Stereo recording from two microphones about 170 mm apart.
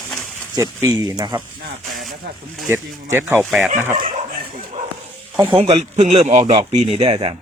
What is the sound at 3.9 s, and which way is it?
Dog, 55° right (ahead or behind).